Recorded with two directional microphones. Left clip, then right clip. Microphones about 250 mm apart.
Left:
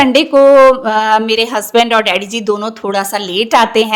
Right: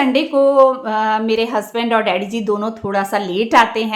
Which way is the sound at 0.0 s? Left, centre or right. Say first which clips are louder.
Left 7 dB; left.